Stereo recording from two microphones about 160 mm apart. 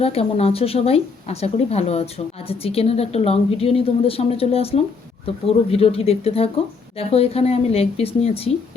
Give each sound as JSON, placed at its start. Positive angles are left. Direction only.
{"t": 0.0, "sound": "a woman's voice", "side_deg": 40}